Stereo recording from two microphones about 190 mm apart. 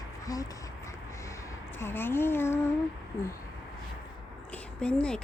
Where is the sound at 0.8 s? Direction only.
15° left (ahead or behind).